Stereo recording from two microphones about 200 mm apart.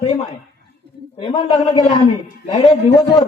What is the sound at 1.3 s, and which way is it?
A man's voice, 20° left (ahead or behind).